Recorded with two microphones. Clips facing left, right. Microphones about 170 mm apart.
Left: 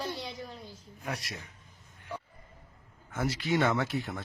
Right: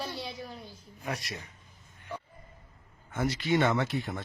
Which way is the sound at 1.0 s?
Centre (ahead or behind).